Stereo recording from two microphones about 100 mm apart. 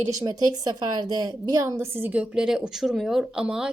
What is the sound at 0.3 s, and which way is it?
A woman's voice, 40° right (ahead or behind).